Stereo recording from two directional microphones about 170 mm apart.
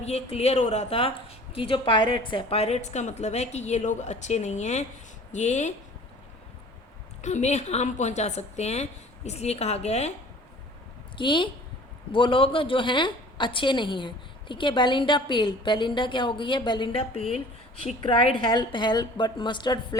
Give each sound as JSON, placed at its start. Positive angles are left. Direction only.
{"t": 0.0, "sound": "a woman's voice", "side_deg": 40}
{"t": 7.2, "sound": "a woman's voice", "side_deg": 45}
{"t": 11.2, "sound": "a woman's voice", "side_deg": 30}